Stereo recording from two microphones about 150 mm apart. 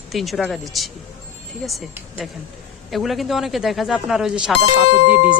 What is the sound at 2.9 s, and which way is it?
Speech, centre (ahead or behind).